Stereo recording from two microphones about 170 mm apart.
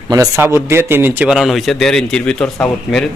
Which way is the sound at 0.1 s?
20° right (ahead or behind).